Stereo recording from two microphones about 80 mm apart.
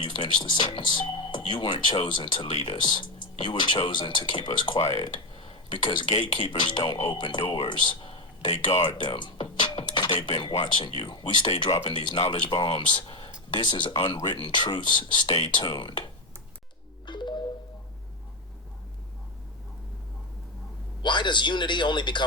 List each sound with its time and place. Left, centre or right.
0.0 s speech: left
1.5 s speech: left
7.7 s a sound: left
9.0 s speech: left
11.9 s speech: left
13.6 s speech: left
17.1 s music: left
21.0 s speech: left